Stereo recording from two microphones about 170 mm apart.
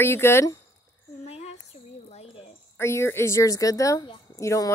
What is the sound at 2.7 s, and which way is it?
A woman's voice, 15° left (ahead or behind).